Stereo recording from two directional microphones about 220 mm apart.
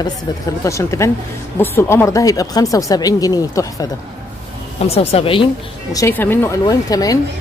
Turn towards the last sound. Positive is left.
turn(degrees=15)  # may be behind; listen again after turning